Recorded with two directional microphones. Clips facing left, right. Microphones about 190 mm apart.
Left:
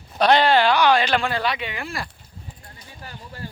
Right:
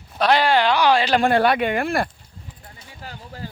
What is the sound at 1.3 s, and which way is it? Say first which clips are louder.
Speech: right 8 dB; 55° right (ahead or behind).